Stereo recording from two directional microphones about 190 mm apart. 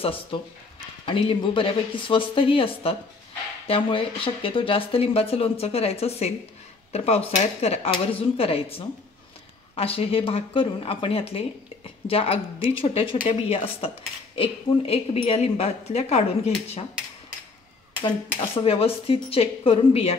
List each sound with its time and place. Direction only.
0.0 s speech: 30° left (ahead or behind)
3.6 s cutlery: 30° left (ahead or behind)
9.8 s speech: 30° left (ahead or behind)
13.3 s cutlery: 30° left (ahead or behind)
18.0 s speech: 25° left (ahead or behind)